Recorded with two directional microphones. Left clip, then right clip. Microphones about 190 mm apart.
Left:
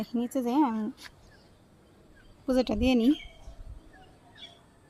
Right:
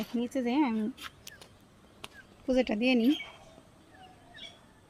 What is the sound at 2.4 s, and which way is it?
Speech, 20° left (ahead or behind).